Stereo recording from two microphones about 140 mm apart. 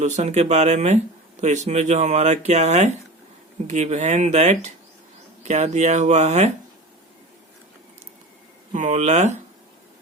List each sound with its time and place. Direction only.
0.2 s speech: 55° right (ahead or behind)
8.7 s speech: 60° right (ahead or behind)